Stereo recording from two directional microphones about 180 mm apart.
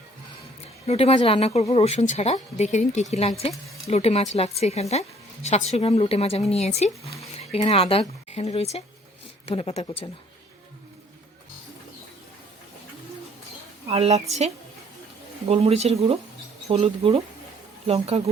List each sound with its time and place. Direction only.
0.9 s a woman's voice: 35° left (ahead or behind)
13.8 s speech: 35° right (ahead or behind)